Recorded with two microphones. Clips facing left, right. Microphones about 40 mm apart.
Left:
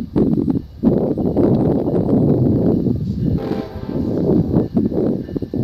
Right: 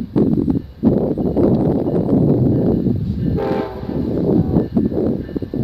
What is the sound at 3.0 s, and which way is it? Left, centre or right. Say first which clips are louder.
Train: right 1 dB; right.